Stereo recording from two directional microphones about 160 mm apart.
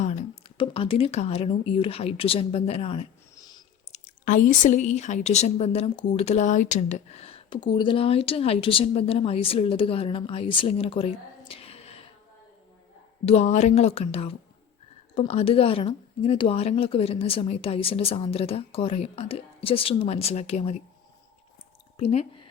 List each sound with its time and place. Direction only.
0.0 s a sound: 45° left (ahead or behind)
0.5 s speech: 35° left (ahead or behind)
3.3 s a sound: 25° left (ahead or behind)
3.9 s speech: 55° left (ahead or behind)
13.2 s speech: 45° left (ahead or behind)
21.9 s speech: 40° left (ahead or behind)